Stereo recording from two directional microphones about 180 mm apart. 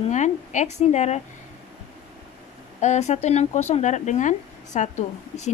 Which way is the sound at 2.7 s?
40° left (ahead or behind).